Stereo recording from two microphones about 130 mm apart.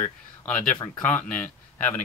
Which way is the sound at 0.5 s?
10° left (ahead or behind).